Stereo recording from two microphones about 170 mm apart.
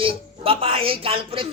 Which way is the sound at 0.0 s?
30° right (ahead or behind).